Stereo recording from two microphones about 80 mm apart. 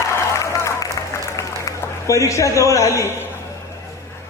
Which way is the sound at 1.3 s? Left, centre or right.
Left.